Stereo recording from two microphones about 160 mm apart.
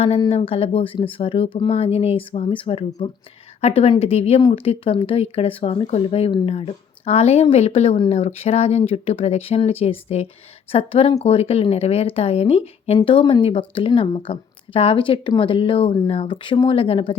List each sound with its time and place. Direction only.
0.2 s speech: 35° left (ahead or behind)